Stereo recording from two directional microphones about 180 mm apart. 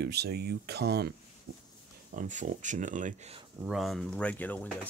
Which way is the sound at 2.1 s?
45° right (ahead or behind).